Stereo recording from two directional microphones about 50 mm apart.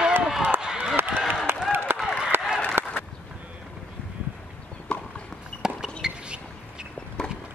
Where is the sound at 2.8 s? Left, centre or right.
Right.